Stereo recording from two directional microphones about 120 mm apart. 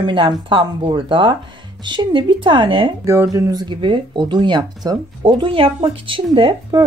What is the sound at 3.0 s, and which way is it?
Speech, 25° right (ahead or behind).